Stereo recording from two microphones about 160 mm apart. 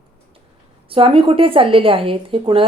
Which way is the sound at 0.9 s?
35° right (ahead or behind).